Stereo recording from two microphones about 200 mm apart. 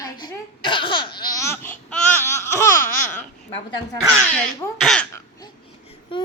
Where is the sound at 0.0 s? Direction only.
20° left (ahead or behind).